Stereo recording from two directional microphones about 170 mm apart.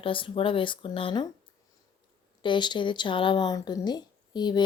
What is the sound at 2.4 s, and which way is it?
Speech, 25° left (ahead or behind).